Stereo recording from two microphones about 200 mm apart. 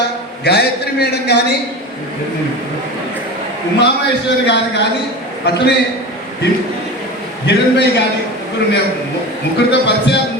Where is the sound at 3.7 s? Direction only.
60° left (ahead or behind).